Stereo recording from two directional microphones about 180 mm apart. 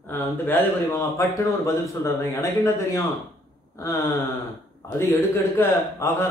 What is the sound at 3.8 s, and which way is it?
Speech, 15° left (ahead or behind).